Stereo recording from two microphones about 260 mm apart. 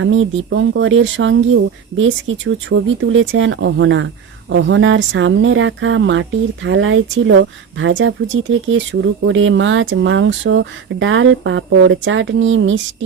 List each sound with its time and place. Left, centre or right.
0.0 s speech: right